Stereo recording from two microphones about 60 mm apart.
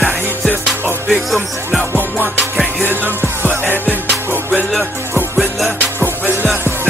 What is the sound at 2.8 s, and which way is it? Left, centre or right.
Music, right.